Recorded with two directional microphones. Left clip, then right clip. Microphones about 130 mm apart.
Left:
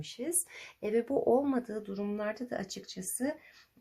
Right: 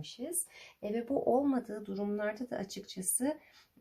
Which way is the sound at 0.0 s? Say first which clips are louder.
Left 4 dB; 40° left (ahead or behind).